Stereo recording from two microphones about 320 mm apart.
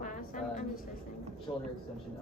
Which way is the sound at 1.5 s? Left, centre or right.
Centre.